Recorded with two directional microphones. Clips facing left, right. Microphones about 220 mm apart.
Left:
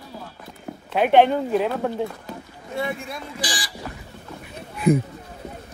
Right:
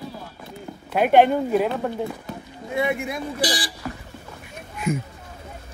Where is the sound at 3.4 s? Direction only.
35° right (ahead or behind).